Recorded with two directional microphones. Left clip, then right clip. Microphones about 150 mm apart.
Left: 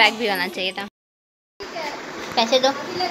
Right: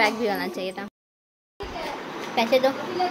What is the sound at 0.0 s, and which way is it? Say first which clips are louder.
Child singing: left 5 dB; centre (ahead or behind).